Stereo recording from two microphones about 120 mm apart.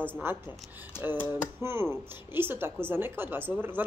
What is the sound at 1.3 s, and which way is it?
Speech, 20° right (ahead or behind).